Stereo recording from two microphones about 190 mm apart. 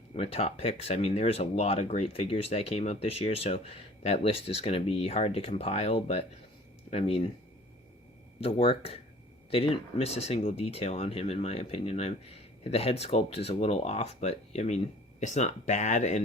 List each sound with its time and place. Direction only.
0.1 s speech: 30° left (ahead or behind)
8.4 s speech: 30° left (ahead or behind)